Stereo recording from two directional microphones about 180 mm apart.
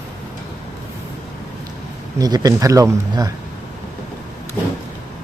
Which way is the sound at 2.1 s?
20° right (ahead or behind).